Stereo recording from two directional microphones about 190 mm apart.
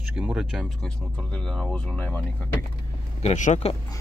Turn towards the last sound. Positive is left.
turn(degrees=40)  # may be behind; listen again after turning